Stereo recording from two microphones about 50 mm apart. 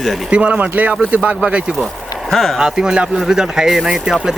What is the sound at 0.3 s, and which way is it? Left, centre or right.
Speech, right.